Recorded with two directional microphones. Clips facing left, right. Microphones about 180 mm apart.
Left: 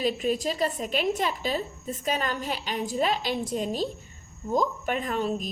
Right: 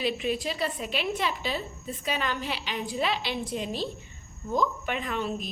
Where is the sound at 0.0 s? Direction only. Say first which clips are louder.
Left 3 dB; 45° left (ahead or behind).